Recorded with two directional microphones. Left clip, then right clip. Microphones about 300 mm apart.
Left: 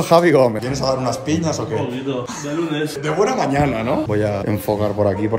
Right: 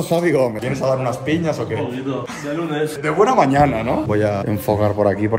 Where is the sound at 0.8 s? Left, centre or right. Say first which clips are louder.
Right 1 dB; centre.